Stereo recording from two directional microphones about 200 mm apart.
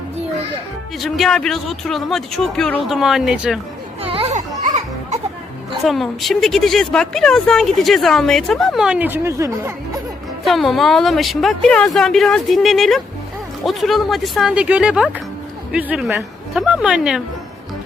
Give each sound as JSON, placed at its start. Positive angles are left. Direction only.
{"t": 0.9, "sound": "a woman's voice", "side_deg": 0}
{"t": 4.0, "sound": "children playing", "side_deg": -30}
{"t": 5.8, "sound": "a woman's voice", "side_deg": 0}
{"t": 10.4, "sound": "a woman's voice", "side_deg": 0}